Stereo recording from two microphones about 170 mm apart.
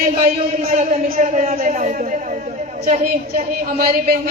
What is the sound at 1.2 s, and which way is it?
A man's voice, 45° right (ahead or behind).